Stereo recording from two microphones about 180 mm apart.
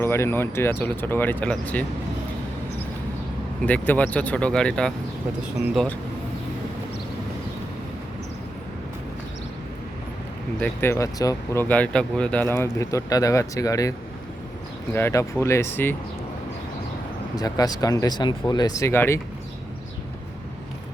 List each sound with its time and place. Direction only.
0.0 s speech: 15° left (ahead or behind)
3.7 s speech: 10° left (ahead or behind)
10.6 s speech: 15° left (ahead or behind)
11.7 s speech: 5° left (ahead or behind)
14.9 s speech: 15° left (ahead or behind)
17.3 s speech: 20° left (ahead or behind)